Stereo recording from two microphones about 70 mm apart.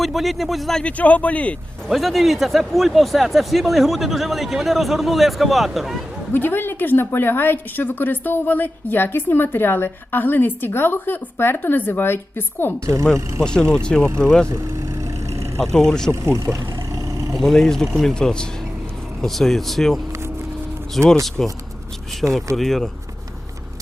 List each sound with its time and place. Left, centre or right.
0.0 s a man's voice: centre
0.8 s speech: centre
1.9 s a man's voice: centre
6.3 s a woman's voice: left
12.8 s speech: right
13.4 s speech: centre
15.7 s speech: centre
16.2 s vehicle: right
17.3 s a man's voice: centre
21.0 s a man's voice: centre